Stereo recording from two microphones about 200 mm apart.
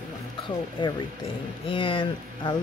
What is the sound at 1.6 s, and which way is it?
Speech, 25° left (ahead or behind).